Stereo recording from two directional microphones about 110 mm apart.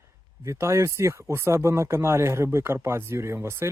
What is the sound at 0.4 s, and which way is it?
Speech, 25° right (ahead or behind).